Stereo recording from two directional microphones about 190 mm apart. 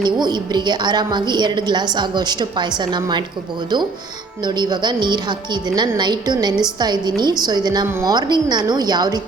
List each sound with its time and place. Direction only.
0.0 s a woman's voice: 20° right (ahead or behind)
4.4 s a woman's voice: 25° right (ahead or behind)